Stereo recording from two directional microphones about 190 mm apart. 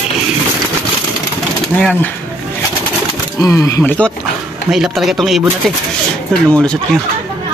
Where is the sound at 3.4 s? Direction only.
15° left (ahead or behind).